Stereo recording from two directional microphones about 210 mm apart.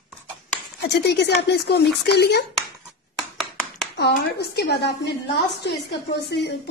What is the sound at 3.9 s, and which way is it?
A woman's voice, 50° left (ahead or behind).